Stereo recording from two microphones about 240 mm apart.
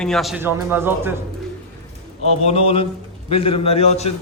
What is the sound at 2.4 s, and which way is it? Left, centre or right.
A man's voice, left.